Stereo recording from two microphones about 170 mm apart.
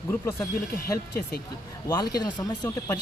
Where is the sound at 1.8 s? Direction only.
20° left (ahead or behind).